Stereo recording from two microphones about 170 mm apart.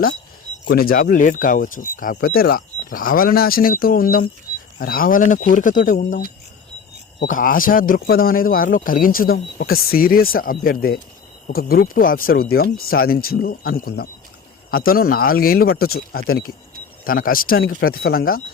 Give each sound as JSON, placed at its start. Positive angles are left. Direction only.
{"t": 0.6, "sound": "speech", "side_deg": 65}
{"t": 4.5, "sound": "a sound", "side_deg": 25}
{"t": 4.8, "sound": "speech", "side_deg": 55}
{"t": 7.3, "sound": "speech", "side_deg": 55}